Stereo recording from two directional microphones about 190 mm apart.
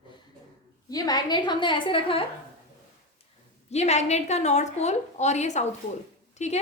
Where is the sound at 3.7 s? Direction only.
35° left (ahead or behind).